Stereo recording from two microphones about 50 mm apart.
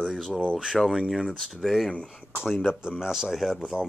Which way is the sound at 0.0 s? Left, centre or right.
Centre.